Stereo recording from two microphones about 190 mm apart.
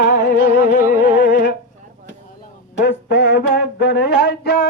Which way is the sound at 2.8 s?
65° left (ahead or behind).